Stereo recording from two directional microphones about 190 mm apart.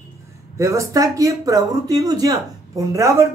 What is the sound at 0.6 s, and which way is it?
Speech, 15° right (ahead or behind).